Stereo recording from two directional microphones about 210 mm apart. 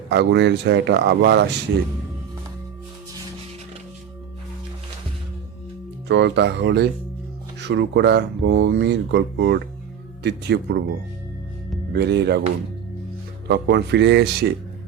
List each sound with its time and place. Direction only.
0.1 s speech: 55° right (ahead or behind)
6.1 s speech: 55° right (ahead or behind)
11.9 s speech: 55° right (ahead or behind)
13.5 s speech: 55° right (ahead or behind)